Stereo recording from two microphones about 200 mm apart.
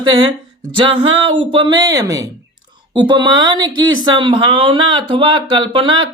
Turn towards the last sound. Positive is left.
turn(degrees=-25)  # may be behind; listen again after turning